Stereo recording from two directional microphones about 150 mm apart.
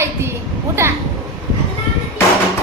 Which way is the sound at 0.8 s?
15° right (ahead or behind).